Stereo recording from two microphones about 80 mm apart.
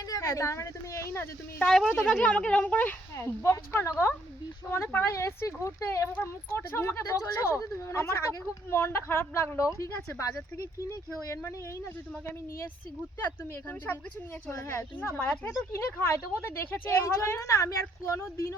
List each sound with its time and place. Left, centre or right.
0.1 s a woman's voice: left
1.5 s speech: centre
3.2 s speech: left
13.1 s speech: left
15.7 s speech: left